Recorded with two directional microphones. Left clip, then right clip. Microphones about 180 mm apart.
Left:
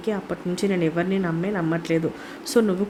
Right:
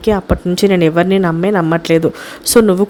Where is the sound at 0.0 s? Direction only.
45° right (ahead or behind).